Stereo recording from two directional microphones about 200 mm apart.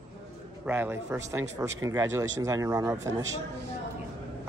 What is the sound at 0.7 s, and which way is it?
Speech, 10° right (ahead or behind).